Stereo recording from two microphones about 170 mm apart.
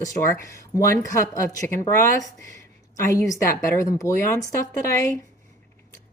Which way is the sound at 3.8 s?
20° left (ahead or behind).